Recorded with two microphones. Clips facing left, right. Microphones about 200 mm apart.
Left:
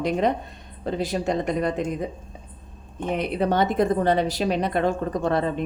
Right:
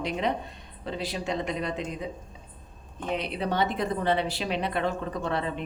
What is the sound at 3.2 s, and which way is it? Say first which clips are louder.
A woman's voice: left 7 dB; 50° left (ahead or behind).